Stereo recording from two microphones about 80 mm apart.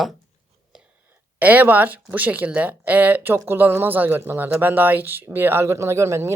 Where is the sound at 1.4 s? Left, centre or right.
Right.